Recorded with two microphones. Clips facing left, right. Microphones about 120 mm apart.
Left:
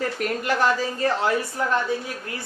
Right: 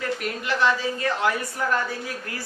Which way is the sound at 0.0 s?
45° left (ahead or behind).